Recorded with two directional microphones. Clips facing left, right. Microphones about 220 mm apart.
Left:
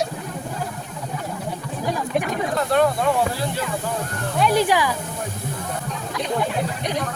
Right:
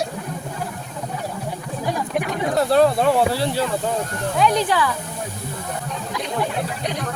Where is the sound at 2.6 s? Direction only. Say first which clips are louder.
Right 4 dB; 35° right (ahead or behind).